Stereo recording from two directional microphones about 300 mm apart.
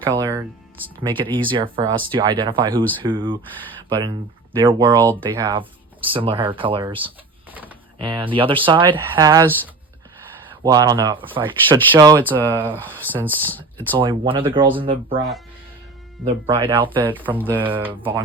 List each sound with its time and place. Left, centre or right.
0.2 s speech: centre
7.5 s a sound: centre
7.9 s speech: centre
10.5 s speech: centre
13.2 s speech: centre
14.0 s speech: centre
16.5 s speech: centre
17.1 s speech: centre